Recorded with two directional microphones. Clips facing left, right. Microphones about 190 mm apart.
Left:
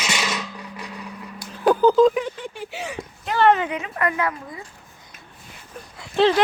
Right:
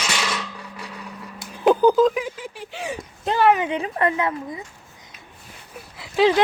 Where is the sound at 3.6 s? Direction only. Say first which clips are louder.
Right 3 dB; 30° right (ahead or behind).